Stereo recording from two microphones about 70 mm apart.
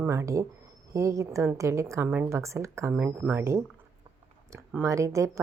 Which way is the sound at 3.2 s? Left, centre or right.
Right.